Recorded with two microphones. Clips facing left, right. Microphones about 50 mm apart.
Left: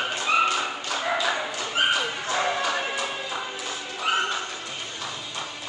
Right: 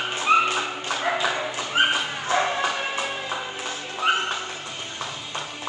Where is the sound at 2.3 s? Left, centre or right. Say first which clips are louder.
Right 5 dB; right.